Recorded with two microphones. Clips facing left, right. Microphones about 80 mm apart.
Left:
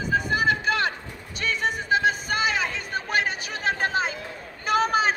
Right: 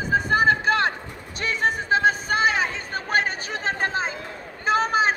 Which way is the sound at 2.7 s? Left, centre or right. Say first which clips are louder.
Right 2 dB; right.